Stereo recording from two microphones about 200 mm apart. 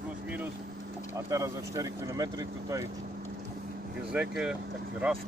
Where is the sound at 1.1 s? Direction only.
15° right (ahead or behind).